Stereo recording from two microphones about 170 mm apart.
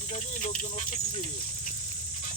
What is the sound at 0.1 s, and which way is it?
Speech, 45° left (ahead or behind).